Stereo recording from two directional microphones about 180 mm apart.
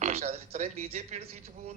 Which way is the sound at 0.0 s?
35° right (ahead or behind).